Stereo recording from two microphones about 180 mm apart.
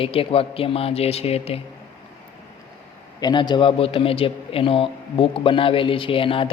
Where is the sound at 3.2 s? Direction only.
25° left (ahead or behind).